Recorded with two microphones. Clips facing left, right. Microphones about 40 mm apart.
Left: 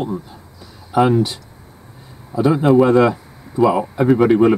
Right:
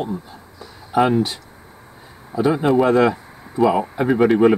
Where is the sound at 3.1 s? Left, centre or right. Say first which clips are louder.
Left 1 dB; centre.